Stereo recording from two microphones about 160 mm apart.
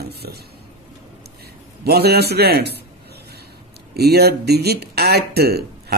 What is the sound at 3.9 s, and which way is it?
Speech, 85° right.